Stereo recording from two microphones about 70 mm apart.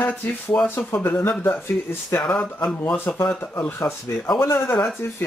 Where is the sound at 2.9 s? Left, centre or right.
Left.